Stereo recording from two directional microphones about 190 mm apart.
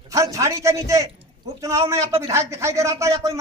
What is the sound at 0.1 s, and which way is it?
Speech, 15° right (ahead or behind).